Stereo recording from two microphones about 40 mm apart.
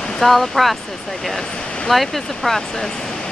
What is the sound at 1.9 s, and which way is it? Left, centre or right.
Speech, centre.